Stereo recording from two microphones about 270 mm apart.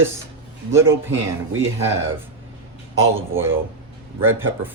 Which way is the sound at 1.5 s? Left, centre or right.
Right.